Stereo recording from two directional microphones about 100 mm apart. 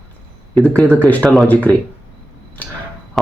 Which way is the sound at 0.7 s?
10° left (ahead or behind).